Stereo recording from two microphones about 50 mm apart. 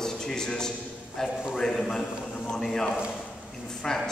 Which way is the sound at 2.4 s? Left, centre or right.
Centre.